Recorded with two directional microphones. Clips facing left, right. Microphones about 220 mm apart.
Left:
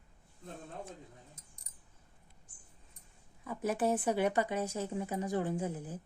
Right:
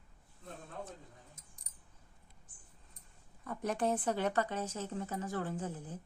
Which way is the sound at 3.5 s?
5° left (ahead or behind).